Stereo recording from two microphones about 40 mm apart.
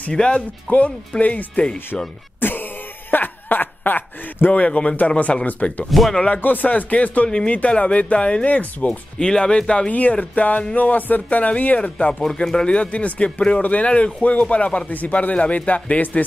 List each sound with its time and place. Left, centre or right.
0.1 s a man's voice: left
0.7 s speech: left
2.4 s a sound: left
4.5 s speech: left
5.5 s speech: left
5.9 s speech: centre
6.4 s speech: left
6.7 s speech: left
7.2 s a man's voice: left
7.5 s speech: left
9.2 s a man's voice: left
10.1 s speech: left
12.1 s speech: centre
12.6 s a man's voice: left